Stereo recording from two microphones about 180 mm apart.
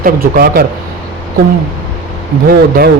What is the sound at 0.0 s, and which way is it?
Speech, 55° right (ahead or behind).